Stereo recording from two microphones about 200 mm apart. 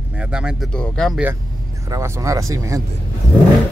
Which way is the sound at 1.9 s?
15° right (ahead or behind).